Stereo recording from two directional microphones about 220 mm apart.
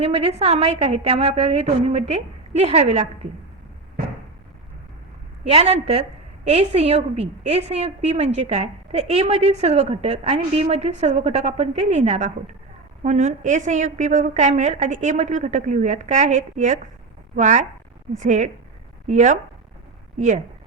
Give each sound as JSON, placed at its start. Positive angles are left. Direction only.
{"t": 0.0, "sound": "a woman's voice", "side_deg": -25}
{"t": 5.5, "sound": "a woman's voice", "side_deg": -25}